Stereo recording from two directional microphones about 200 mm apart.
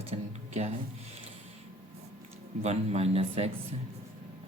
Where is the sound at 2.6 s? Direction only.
30° right (ahead or behind).